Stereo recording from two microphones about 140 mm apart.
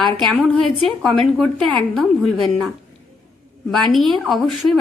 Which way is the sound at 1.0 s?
Centre (ahead or behind).